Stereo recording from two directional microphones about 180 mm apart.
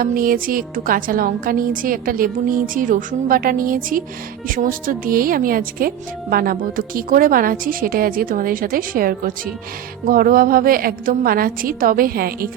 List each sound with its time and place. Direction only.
0.0 s a woman's voice: 55° right (ahead or behind)